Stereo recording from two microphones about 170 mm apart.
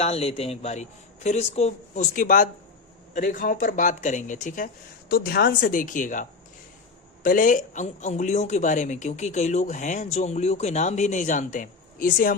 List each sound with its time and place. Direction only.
0.0 s speech: 35° left (ahead or behind); by 12.4 s 55° left (ahead or behind)